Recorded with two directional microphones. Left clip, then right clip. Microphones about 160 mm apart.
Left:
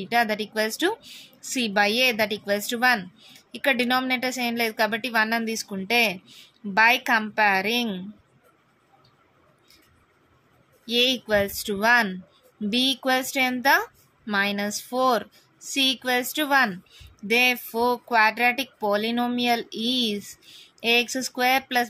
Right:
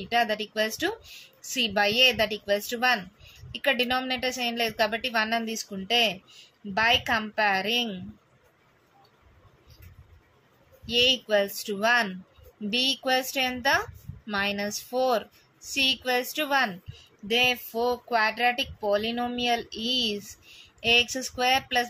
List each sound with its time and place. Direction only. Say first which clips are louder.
0.0 s speech: left 2 dB; 45° left (ahead or behind)
10.9 s speech: left 1 dB; 45° left (ahead or behind)